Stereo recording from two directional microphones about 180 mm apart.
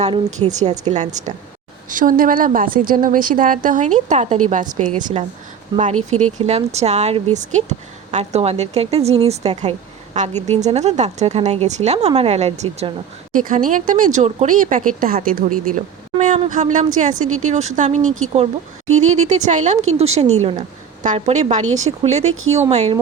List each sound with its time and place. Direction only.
0.0 s a woman's voice: 40° right (ahead or behind)
13.3 s a woman's voice: 45° right (ahead or behind)